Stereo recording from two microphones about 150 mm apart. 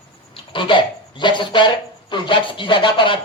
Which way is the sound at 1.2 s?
30° left (ahead or behind).